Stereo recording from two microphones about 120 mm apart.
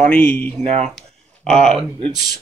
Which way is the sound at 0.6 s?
65° right (ahead or behind).